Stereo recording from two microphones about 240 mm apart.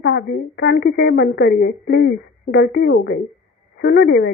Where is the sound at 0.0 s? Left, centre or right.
Left.